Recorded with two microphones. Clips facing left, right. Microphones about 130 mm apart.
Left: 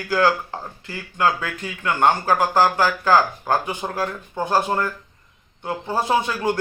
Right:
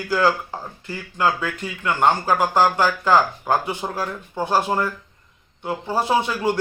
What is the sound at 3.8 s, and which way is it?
A man's voice, centre (ahead or behind).